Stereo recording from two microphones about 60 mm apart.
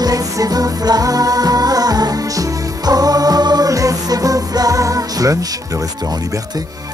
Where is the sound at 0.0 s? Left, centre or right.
Right.